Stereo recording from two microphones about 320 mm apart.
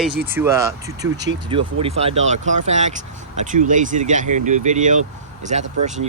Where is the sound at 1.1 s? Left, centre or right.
Right.